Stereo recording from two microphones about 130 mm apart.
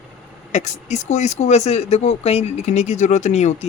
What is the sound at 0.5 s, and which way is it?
Speech, 65° left (ahead or behind).